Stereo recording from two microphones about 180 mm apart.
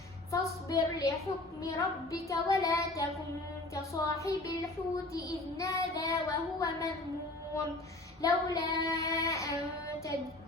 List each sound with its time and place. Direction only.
0.3 s child singing: 15° left (ahead or behind)
8.2 s child singing: 20° left (ahead or behind)